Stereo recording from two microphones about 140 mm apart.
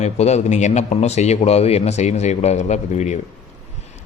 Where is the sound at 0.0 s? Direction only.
50° left (ahead or behind).